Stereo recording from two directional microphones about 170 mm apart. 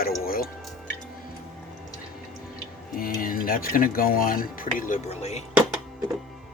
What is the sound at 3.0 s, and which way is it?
Speech, 60° left (ahead or behind).